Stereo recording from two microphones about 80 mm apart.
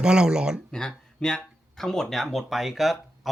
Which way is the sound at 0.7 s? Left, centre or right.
Centre.